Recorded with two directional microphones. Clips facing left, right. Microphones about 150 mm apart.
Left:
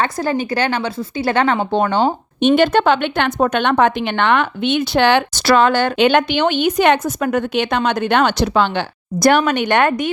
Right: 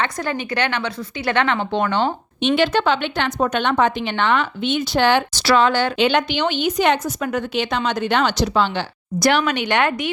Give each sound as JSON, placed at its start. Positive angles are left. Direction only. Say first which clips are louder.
{"t": 0.0, "sound": "a woman's voice", "louder": "left 5 dB", "side_deg": 35}
{"t": 5.3, "sound": "a woman's voice", "louder": "left 3 dB", "side_deg": 50}